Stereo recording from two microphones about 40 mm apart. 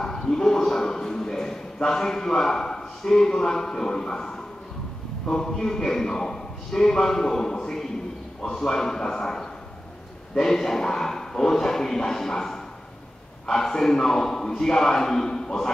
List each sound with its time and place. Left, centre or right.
0.0 s dog: centre
0.7 s a man's voice: centre